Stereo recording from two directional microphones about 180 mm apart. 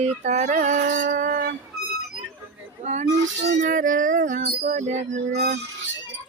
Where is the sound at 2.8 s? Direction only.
40° right (ahead or behind).